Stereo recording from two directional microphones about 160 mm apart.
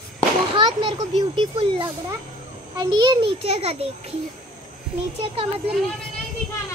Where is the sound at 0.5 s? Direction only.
30° right (ahead or behind).